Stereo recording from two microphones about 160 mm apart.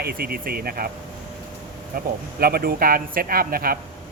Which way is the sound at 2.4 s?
70° right (ahead or behind).